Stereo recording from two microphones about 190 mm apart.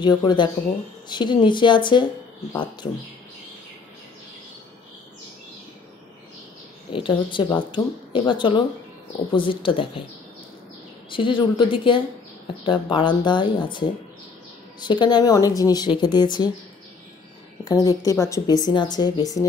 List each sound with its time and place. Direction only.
0.0 s speech: 25° left (ahead or behind)
6.9 s speech: 25° left (ahead or behind)
11.1 s speech: 25° left (ahead or behind)
17.6 s speech: 20° left (ahead or behind)